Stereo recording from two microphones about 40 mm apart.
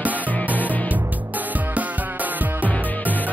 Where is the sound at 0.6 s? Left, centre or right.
Left.